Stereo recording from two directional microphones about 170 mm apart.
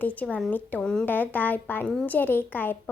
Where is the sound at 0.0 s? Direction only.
10° left (ahead or behind).